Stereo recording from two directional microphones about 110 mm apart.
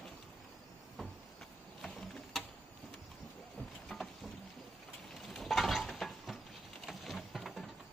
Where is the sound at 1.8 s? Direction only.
5° left (ahead or behind).